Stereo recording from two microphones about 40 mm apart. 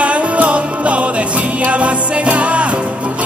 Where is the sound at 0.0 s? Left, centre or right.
Right.